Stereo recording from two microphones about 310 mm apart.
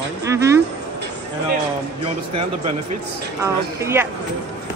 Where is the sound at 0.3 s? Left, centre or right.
Centre.